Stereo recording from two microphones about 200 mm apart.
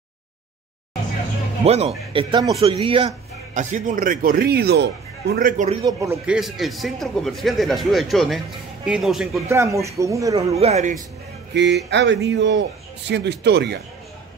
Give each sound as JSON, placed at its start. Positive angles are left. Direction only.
{"t": 1.6, "sound": "a man's voice", "side_deg": -30}
{"t": 3.5, "sound": "a man's voice", "side_deg": -40}
{"t": 5.3, "sound": "a man's voice", "side_deg": -40}
{"t": 5.8, "sound": "speech", "side_deg": -15}
{"t": 6.3, "sound": "speech", "side_deg": 0}
{"t": 9.5, "sound": "speech", "side_deg": -15}
{"t": 10.6, "sound": "a man's voice", "side_deg": -35}
{"t": 11.5, "sound": "a man's voice", "side_deg": -60}